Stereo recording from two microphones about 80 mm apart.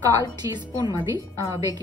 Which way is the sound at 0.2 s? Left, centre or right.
Right.